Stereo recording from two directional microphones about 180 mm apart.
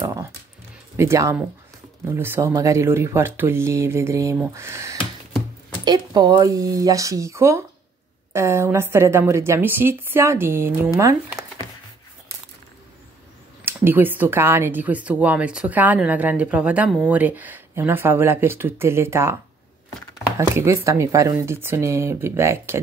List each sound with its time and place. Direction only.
0.0 s dog: 15° right (ahead or behind)
0.9 s speech: 15° right (ahead or behind)
13.7 s speech: 10° right (ahead or behind)